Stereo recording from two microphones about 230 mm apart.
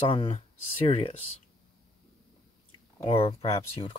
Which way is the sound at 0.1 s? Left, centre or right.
Left.